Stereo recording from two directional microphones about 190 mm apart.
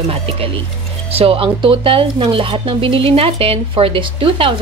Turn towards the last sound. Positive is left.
turn(degrees=-30)  # may be behind; listen again after turning